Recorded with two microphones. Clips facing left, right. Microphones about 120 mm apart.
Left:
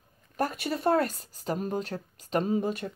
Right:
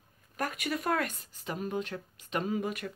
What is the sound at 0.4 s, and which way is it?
Speech, 35° left (ahead or behind).